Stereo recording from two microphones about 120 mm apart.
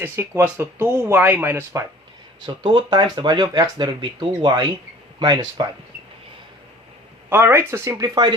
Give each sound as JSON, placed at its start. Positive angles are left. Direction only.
{"t": 0.0, "sound": "speech", "side_deg": -20}
{"t": 2.6, "sound": "speech", "side_deg": -40}
{"t": 7.3, "sound": "speech", "side_deg": -20}